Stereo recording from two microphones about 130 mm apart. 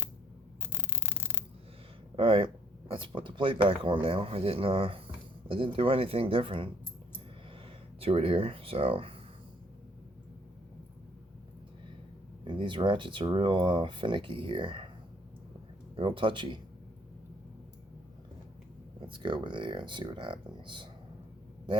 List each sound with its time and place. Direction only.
2.1 s speech: 40° right (ahead or behind)
8.0 s speech: 45° right (ahead or behind)
12.5 s speech: 40° right (ahead or behind)
16.0 s speech: 40° right (ahead or behind)
18.9 s speech: 40° right (ahead or behind)